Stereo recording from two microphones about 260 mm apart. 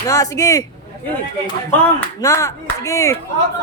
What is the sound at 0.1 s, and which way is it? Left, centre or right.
Speech, centre.